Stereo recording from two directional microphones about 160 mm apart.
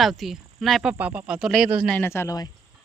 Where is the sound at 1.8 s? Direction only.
10° left (ahead or behind).